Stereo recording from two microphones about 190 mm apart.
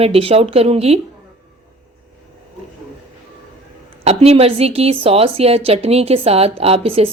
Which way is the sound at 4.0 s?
35° right (ahead or behind).